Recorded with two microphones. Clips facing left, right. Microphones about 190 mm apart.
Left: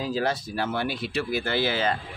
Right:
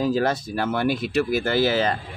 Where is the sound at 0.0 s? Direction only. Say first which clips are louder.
Right 5 dB; 50° right (ahead or behind).